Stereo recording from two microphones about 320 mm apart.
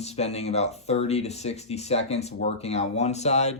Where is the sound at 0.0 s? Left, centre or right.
Centre.